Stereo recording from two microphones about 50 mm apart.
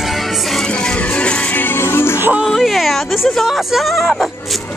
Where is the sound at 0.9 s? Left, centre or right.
Left.